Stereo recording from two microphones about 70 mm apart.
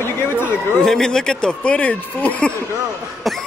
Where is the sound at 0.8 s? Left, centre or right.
Centre.